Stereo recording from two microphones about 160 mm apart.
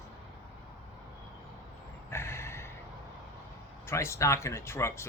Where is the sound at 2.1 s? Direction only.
15° left (ahead or behind).